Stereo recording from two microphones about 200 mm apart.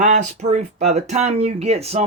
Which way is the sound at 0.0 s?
35° right (ahead or behind).